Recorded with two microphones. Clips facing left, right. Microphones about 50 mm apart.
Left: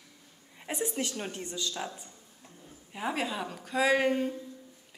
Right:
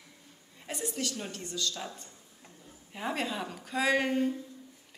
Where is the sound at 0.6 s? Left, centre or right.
Left.